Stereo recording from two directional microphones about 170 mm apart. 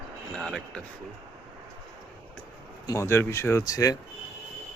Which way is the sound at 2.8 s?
15° left (ahead or behind).